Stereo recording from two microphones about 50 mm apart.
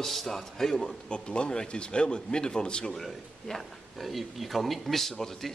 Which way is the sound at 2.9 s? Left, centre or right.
Centre.